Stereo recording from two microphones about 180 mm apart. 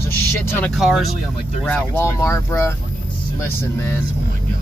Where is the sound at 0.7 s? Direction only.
Centre (ahead or behind).